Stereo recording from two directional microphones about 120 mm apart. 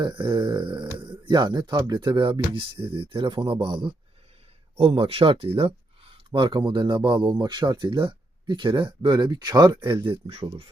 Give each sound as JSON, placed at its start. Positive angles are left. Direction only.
{"t": 0.0, "sound": "speech", "side_deg": -40}
{"t": 4.8, "sound": "speech", "side_deg": -55}